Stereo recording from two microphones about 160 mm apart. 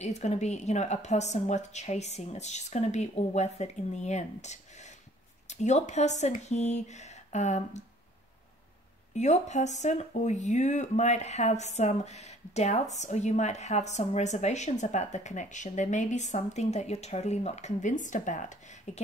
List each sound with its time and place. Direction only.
0.0 s speech: 45° left (ahead or behind)
9.1 s speech: 45° left (ahead or behind)